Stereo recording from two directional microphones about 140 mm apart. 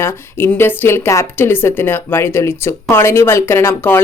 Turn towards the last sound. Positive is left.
turn(degrees=15)  # may be behind; listen again after turning